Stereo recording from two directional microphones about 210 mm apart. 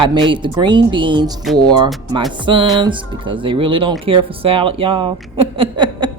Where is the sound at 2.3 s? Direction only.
25° right (ahead or behind).